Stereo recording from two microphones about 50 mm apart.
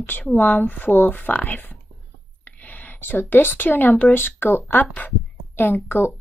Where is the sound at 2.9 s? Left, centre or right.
Left.